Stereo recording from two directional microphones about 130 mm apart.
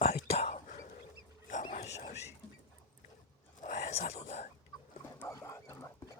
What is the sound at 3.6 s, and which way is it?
Whispering, 65° left (ahead or behind).